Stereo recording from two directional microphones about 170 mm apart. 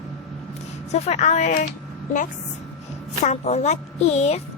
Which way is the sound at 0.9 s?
40° left (ahead or behind).